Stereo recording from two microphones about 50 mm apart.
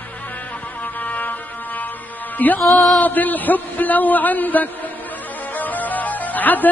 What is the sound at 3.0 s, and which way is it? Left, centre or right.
A man's voice, left.